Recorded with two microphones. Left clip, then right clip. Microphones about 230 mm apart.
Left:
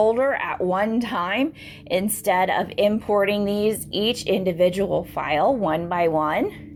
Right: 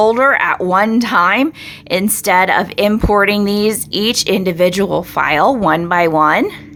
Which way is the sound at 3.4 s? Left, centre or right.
Right.